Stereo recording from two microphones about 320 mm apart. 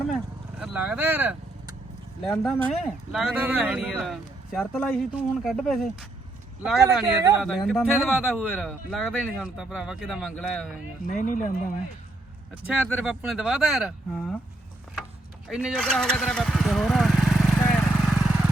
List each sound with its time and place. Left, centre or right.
0.6 s speech: centre
11.0 s speech: left
12.6 s speech: centre
15.4 s vehicle: centre